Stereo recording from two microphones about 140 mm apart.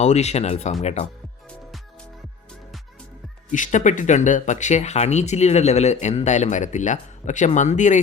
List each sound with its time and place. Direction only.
0.0 s speech: 55° left (ahead or behind)
3.5 s speech: 65° left (ahead or behind)